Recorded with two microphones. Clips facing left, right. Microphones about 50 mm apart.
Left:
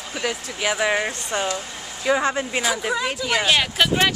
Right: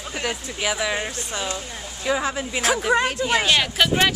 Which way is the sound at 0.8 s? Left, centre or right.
Left.